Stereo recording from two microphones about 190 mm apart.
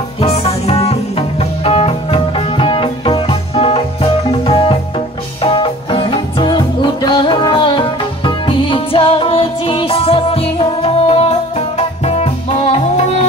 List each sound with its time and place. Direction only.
0.2 s music: 30° left (ahead or behind)